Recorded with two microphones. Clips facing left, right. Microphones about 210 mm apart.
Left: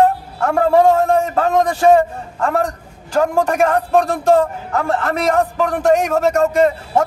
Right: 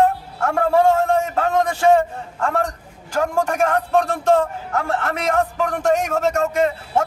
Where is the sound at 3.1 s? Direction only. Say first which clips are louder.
Left 4 dB; 35° left (ahead or behind).